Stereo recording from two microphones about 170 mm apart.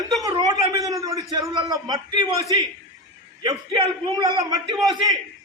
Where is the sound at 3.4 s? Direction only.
25° right (ahead or behind).